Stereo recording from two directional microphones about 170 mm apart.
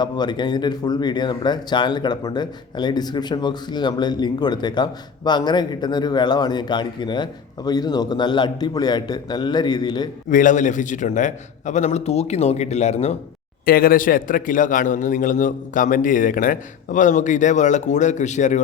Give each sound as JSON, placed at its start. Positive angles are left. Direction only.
{"t": 0.0, "sound": "speech", "side_deg": 25}
{"t": 10.2, "sound": "a man's voice", "side_deg": 50}
{"t": 13.7, "sound": "a man's voice", "side_deg": 60}